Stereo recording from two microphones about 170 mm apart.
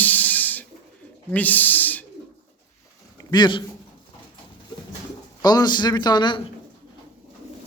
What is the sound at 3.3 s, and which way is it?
Speech, 25° left (ahead or behind).